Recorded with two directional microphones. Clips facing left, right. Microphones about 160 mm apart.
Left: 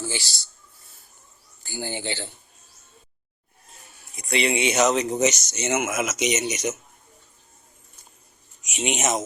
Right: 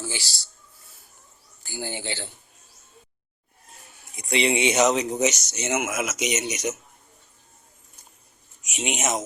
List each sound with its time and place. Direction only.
0.0 s speech: 10° right (ahead or behind)
1.6 s speech: 5° right (ahead or behind)
4.1 s speech: 20° right (ahead or behind)
8.7 s speech: 5° right (ahead or behind)